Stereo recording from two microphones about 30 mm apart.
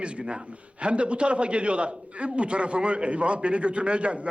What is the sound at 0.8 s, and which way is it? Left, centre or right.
A man's voice, right.